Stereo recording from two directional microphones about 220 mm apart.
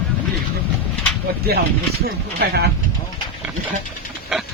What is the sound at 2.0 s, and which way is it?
Speech, 45° right (ahead or behind).